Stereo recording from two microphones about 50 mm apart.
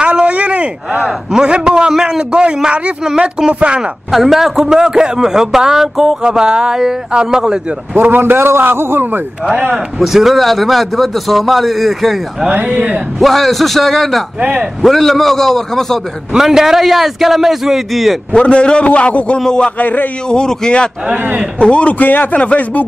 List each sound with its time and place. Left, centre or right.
0.0 s a sound: centre
1.0 s a man's voice: centre
4.1 s a man's voice: centre
7.9 s a man's voice: right
9.9 s a man's voice: centre
12.6 s a man's voice: right
13.2 s a man's voice: centre
14.4 s a man's voice: right
14.8 s a man's voice: centre
16.3 s a man's voice: centre
18.3 s a man's voice: left
19.8 s speech: left
20.2 s a man's voice: centre
22.0 s speech: left